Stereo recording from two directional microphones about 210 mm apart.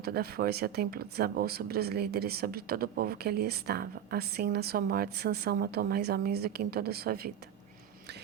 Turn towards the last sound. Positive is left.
turn(degrees=-45)  # may be behind; listen again after turning